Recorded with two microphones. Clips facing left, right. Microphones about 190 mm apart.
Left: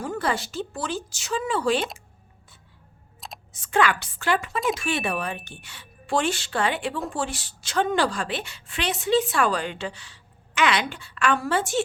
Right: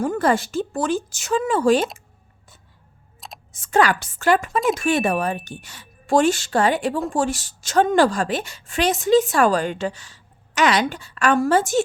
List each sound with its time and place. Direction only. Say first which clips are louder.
0.0 s a woman's voice: right 7 dB; 50° right (ahead or behind)
3.5 s a woman's voice: right 4 dB; 45° right (ahead or behind)